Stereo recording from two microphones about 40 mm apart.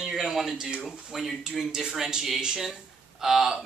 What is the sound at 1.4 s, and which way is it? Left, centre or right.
Speech, centre.